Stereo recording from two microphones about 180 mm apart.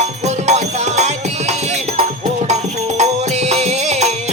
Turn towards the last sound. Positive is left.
turn(degrees=-40)  # may be behind; listen again after turning